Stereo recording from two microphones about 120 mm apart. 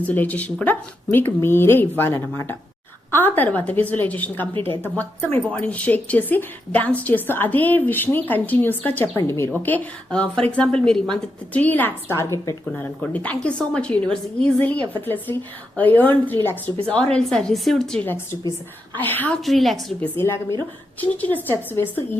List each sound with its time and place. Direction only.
0.0 s a woman's voice: 15° left (ahead or behind)
12.7 s a woman's voice: 15° left (ahead or behind)
18.0 s a woman's voice: 15° left (ahead or behind)
19.4 s a woman's voice: centre (ahead or behind)
20.1 s a woman's voice: 20° left (ahead or behind)